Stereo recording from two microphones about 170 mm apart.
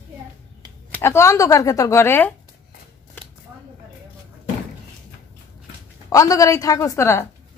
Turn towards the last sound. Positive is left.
turn(degrees=15)  # may be behind; listen again after turning